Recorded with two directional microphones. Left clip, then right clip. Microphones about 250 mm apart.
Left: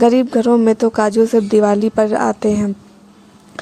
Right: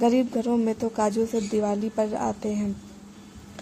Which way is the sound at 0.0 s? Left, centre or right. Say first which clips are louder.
Left 10 dB; left.